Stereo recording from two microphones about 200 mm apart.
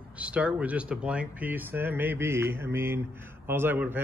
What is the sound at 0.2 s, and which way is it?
A man's voice, 5° right (ahead or behind).